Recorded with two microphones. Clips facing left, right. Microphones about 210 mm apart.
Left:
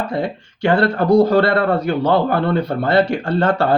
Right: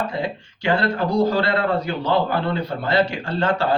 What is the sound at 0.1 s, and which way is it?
A man's voice, 55° left (ahead or behind).